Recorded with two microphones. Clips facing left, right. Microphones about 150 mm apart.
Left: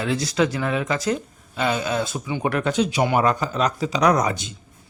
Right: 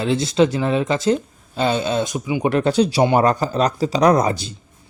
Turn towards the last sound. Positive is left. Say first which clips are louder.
# right 4 dB
turn(degrees=-35)  # may be behind; listen again after turning